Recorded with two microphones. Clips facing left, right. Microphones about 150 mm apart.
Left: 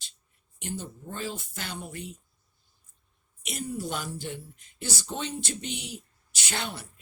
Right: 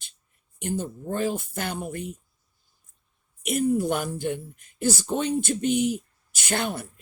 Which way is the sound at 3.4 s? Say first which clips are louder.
Right 11 dB; 50° right (ahead or behind).